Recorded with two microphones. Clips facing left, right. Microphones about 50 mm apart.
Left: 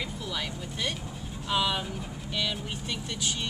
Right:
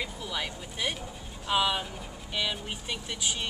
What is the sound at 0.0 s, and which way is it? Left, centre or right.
Vehicle, centre.